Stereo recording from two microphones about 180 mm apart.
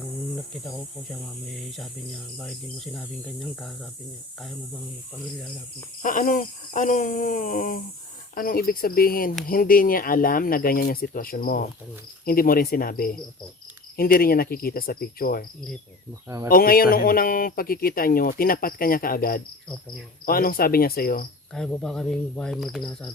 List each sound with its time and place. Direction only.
0.6 s speech: centre (ahead or behind)
6.0 s speech: 45° left (ahead or behind)
8.4 s cricket: 55° left (ahead or behind)
9.5 s speech: 50° left (ahead or behind)
13.9 s cricket: 55° left (ahead or behind)
16.5 s speech: 55° left (ahead or behind)
20.2 s cricket: 55° left (ahead or behind)
21.5 s speech: centre (ahead or behind)